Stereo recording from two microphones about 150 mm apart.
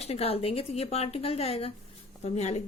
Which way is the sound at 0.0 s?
45° left (ahead or behind).